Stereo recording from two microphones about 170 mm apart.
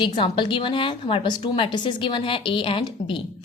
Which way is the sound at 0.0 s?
30° left (ahead or behind).